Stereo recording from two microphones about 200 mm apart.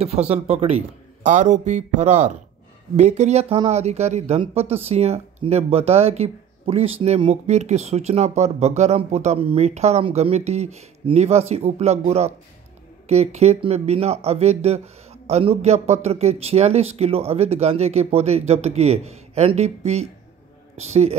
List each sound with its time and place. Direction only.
0.0 s speech: 30° right (ahead or behind)